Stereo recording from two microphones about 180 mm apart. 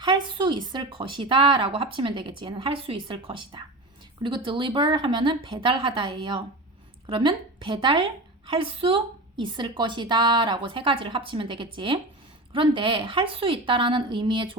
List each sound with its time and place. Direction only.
0.0 s a woman's voice: 25° right (ahead or behind)